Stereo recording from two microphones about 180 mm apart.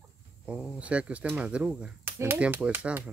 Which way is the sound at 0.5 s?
5° right (ahead or behind).